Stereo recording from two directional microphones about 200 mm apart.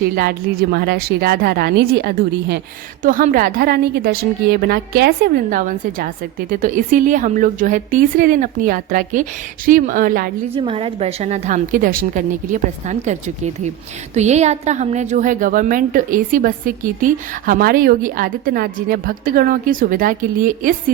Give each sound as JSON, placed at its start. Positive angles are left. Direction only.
{"t": 0.0, "sound": "speech", "side_deg": -50}
{"t": 3.0, "sound": "speech", "side_deg": -40}
{"t": 10.5, "sound": "a woman's voice", "side_deg": -30}